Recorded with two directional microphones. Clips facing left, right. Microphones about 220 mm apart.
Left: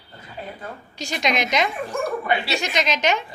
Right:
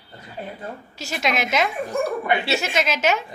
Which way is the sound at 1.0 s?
5° right (ahead or behind).